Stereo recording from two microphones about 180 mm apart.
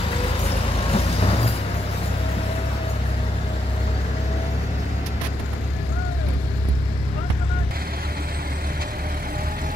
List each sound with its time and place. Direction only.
0.9 s vehicle: 35° left (ahead or behind)